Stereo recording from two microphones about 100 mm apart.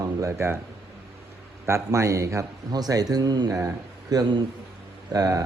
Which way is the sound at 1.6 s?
30° right (ahead or behind).